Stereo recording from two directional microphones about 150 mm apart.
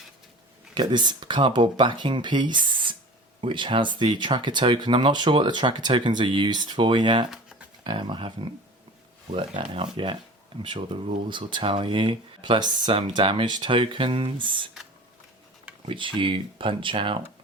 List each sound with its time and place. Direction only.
0.7 s speech: 30° right (ahead or behind)
9.3 s speech: 35° right (ahead or behind)
15.9 s speech: 35° right (ahead or behind)